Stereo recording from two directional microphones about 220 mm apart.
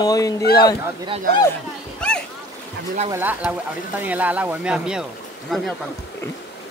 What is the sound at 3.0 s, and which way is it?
A man's voice, 10° right (ahead or behind).